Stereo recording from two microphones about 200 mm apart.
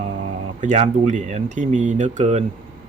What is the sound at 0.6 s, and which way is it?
Speech, 35° right (ahead or behind).